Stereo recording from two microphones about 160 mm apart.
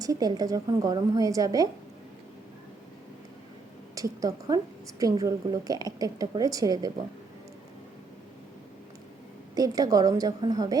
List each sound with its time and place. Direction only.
0.0 s a woman's voice: 25° right (ahead or behind)
3.9 s a woman's voice: 20° right (ahead or behind)
9.6 s a woman's voice: 20° right (ahead or behind)